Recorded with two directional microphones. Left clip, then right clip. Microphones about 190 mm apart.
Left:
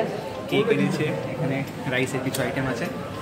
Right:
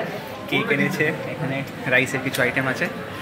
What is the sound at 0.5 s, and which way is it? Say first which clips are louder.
Speech: right 1 dB; 25° right (ahead or behind).